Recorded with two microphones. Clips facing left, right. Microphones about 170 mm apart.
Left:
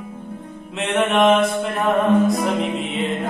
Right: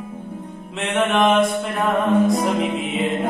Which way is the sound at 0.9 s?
Centre (ahead or behind).